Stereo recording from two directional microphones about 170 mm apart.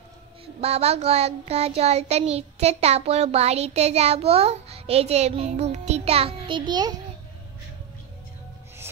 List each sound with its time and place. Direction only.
0.6 s child singing: 35° right (ahead or behind)